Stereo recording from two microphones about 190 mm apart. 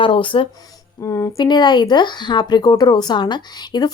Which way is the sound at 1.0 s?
15° left (ahead or behind).